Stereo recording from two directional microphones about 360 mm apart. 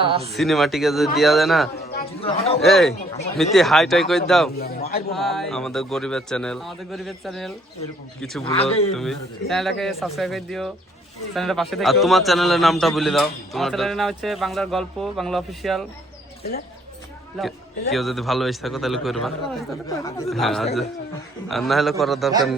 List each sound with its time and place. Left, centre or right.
0.0 s speech: centre
0.3 s a man's voice: centre
2.0 s speech: centre
2.6 s a man's voice: centre
4.5 s a man's voice: left
5.1 s a man's voice: centre
8.4 s speech: centre
8.9 s a man's voice: centre
17.9 s a man's voice: centre